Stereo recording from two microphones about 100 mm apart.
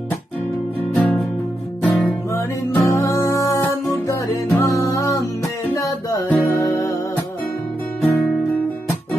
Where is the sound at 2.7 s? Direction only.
25° left (ahead or behind).